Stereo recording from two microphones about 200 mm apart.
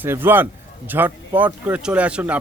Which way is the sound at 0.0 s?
10° right (ahead or behind).